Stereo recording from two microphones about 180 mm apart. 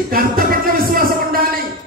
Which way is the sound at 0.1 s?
55° right (ahead or behind).